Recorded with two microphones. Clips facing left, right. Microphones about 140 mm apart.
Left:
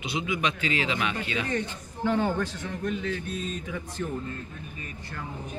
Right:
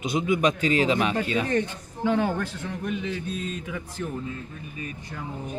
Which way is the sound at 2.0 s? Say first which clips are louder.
Right 2 dB; 10° right (ahead or behind).